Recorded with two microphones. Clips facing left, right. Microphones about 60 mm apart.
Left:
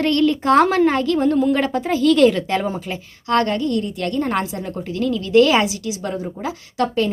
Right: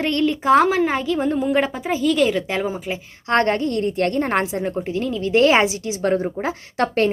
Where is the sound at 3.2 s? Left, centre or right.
Right.